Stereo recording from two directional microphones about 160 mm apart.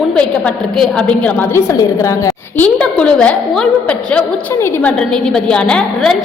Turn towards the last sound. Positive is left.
turn(degrees=5)  # may be behind; listen again after turning